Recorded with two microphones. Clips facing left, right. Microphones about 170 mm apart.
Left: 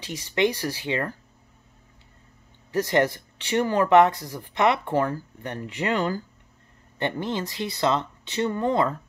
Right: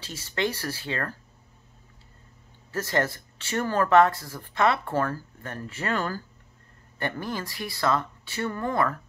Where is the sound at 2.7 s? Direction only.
15° left (ahead or behind).